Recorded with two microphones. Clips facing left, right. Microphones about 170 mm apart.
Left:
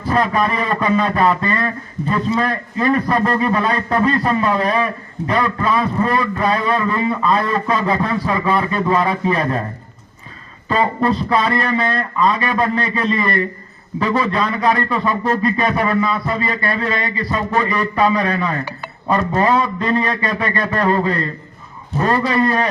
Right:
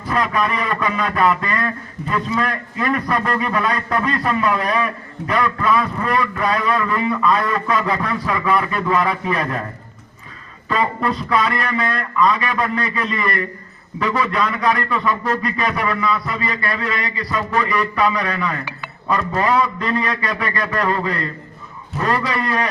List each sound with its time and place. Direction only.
0.1 s a man's voice: 30° left (ahead or behind)
10.7 s a man's voice: 30° left (ahead or behind)